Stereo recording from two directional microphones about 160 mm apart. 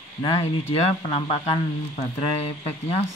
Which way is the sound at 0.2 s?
40° left (ahead or behind).